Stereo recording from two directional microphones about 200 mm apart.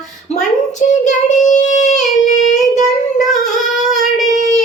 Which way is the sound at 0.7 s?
40° left (ahead or behind).